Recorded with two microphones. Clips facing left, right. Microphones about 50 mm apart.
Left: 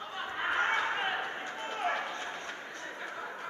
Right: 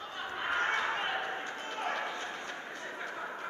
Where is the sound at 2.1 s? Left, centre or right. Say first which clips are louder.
Even; centre.